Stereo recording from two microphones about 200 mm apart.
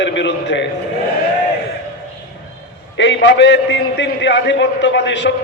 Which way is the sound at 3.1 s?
60° left (ahead or behind).